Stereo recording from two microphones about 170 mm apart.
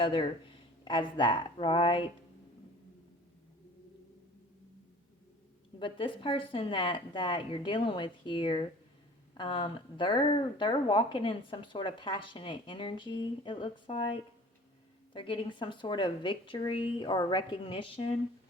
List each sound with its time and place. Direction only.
0.0 s speech: 30° left (ahead or behind)
5.8 s speech: 30° left (ahead or behind)
15.1 s speech: 30° left (ahead or behind)